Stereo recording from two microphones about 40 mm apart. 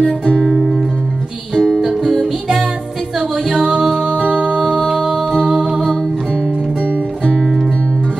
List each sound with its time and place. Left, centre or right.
0.4 s music: centre
1.8 s music: centre
3.2 s music: right
4.6 s music: centre
5.6 s music: centre
7.3 s music: centre